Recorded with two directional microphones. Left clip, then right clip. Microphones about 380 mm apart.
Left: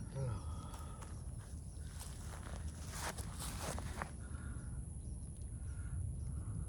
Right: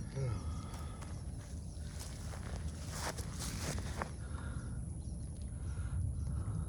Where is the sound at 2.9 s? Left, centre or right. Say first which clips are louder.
Right 3 dB; centre.